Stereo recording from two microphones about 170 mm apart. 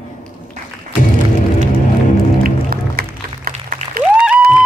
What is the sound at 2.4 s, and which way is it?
Music, 60° right (ahead or behind).